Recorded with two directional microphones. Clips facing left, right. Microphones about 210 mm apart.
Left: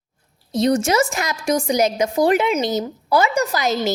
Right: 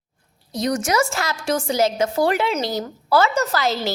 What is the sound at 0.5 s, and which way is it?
A woman's voice, 25° left (ahead or behind).